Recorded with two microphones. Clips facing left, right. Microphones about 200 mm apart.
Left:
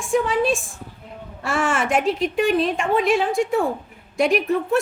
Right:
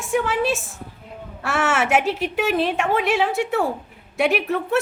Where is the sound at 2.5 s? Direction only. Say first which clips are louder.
Right 1 dB; 65° right (ahead or behind).